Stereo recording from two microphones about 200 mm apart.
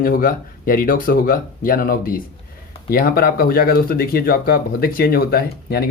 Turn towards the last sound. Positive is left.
turn(degrees=50)  # may be behind; listen again after turning